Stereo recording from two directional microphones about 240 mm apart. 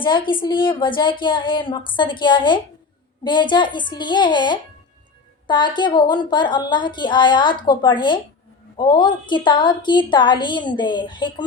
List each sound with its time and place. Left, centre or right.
0.0 s a woman's voice: centre